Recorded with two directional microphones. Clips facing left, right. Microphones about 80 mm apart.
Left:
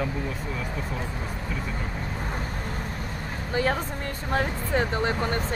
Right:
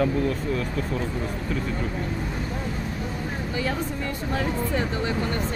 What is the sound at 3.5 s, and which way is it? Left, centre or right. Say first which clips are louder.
Speech: left 4 dB; left.